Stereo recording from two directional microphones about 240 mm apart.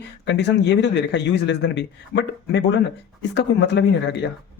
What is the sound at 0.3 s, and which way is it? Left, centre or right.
Speech, left.